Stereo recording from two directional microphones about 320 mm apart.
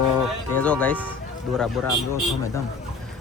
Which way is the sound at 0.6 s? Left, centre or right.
Centre.